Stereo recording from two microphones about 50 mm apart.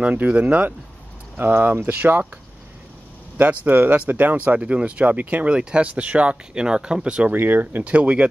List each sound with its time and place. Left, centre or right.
0.0 s speech: right
1.3 s speech: right
3.3 s speech: right; by 7.3 s centre
7.3 s speech: right
7.8 s speech: right